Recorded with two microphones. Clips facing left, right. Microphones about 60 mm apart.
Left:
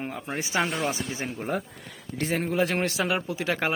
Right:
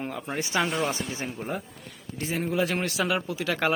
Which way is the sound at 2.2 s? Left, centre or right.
Left.